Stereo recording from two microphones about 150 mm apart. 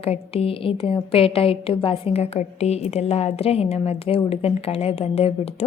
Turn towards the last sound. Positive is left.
turn(degrees=40)  # may be behind; listen again after turning